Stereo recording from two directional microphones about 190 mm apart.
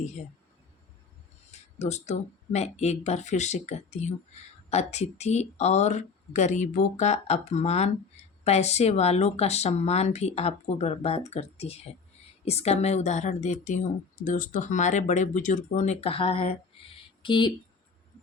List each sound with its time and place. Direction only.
1.5 s speech: 35° left (ahead or behind)